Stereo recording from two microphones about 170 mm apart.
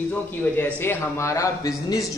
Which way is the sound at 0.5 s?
15° left (ahead or behind).